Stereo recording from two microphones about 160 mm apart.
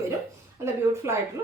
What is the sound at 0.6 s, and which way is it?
Speech, 15° right (ahead or behind).